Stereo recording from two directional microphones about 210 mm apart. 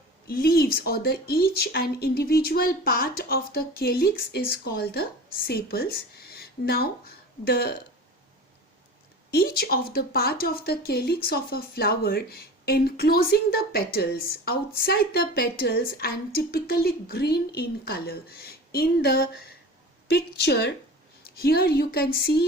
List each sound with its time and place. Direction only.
0.3 s a woman's voice: 45° left (ahead or behind)
9.3 s speech: 45° left (ahead or behind)